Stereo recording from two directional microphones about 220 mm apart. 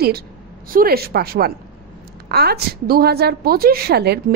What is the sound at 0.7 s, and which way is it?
A woman's voice, 45° right (ahead or behind).